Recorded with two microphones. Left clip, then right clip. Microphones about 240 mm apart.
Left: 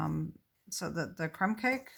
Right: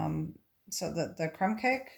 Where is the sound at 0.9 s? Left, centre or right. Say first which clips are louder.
Right 2 dB; left.